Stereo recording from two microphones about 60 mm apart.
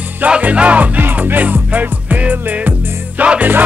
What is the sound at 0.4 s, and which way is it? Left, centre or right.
Music, right.